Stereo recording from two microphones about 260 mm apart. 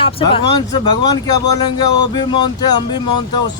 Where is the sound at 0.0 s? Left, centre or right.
Left.